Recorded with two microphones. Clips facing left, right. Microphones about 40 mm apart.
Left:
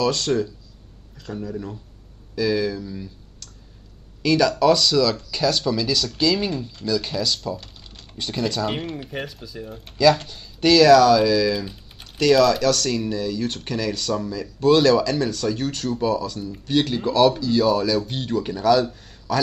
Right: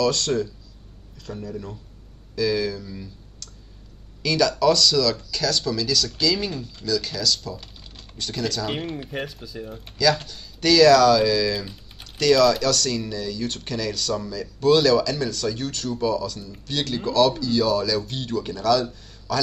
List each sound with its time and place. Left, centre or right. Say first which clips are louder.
0.0 s speech: left 1 dB; centre
7.6 s typing: even; centre
8.2 s speech: left 2 dB; centre
8.6 s speech: left 2 dB; centre
10.2 s speech: left 3 dB; centre